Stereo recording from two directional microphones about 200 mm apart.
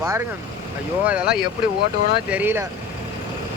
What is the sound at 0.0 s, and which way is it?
Speech, 10° right (ahead or behind).